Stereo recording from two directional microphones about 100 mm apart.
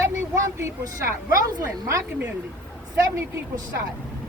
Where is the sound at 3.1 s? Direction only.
30° right (ahead or behind).